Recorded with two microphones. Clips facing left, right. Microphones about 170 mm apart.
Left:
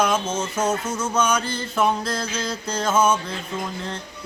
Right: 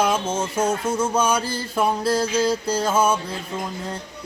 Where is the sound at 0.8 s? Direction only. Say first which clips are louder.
Right 2 dB; 30° right (ahead or behind).